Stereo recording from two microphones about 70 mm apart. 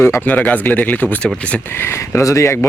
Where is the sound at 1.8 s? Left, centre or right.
Left.